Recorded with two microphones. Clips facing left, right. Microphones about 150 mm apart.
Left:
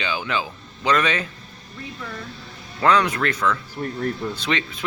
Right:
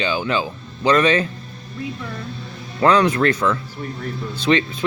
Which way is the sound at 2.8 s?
30° right (ahead or behind).